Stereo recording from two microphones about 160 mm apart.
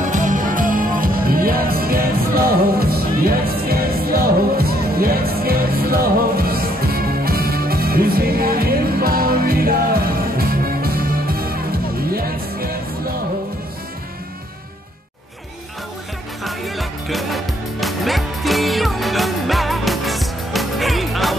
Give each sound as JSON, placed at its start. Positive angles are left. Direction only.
{"t": 0.0, "sound": "music", "side_deg": -50}
{"t": 16.4, "sound": "music", "side_deg": 0}